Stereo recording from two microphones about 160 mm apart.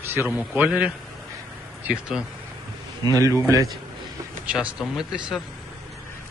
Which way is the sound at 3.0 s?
20° right (ahead or behind).